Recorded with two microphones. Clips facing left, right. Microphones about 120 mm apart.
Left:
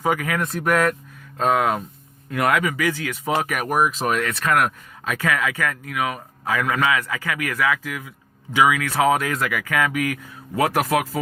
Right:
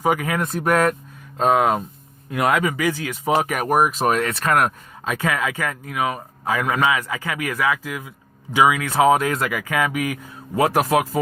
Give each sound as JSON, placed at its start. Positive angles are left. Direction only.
{"t": 0.0, "sound": "speech", "side_deg": -20}
{"t": 1.4, "sound": "speech", "side_deg": -25}
{"t": 3.7, "sound": "speech", "side_deg": -50}